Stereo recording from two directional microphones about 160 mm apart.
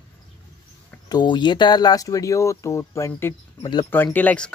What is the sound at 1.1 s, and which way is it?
Speech, 30° left (ahead or behind).